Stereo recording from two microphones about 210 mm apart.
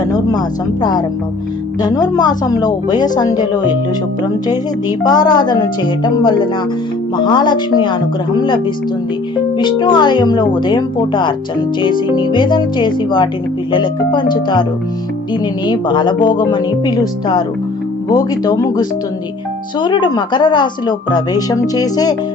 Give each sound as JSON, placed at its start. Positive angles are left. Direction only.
{"t": 0.0, "sound": "a woman's voice", "side_deg": 20}
{"t": 15.6, "sound": "a woman's voice", "side_deg": 20}
{"t": 19.8, "sound": "a woman's voice", "side_deg": 20}